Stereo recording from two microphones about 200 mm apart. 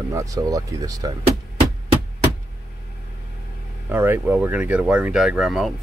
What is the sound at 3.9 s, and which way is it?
Speech, 10° right (ahead or behind).